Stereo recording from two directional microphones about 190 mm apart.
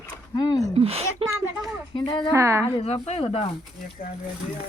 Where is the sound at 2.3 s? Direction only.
15° right (ahead or behind).